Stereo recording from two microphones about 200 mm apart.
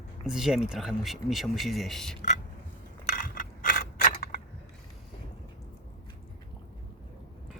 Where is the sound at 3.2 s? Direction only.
45° left (ahead or behind).